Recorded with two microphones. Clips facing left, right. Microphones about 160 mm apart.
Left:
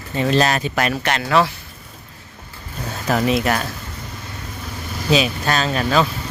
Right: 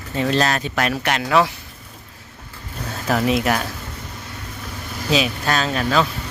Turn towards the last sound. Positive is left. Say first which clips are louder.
# left 1 dB
turn(degrees=5)  # may be behind; listen again after turning